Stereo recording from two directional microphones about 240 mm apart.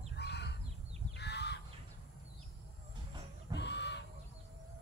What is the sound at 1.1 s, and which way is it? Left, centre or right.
Crow, left.